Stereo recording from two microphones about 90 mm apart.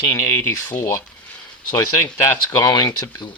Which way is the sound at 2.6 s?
50° left (ahead or behind).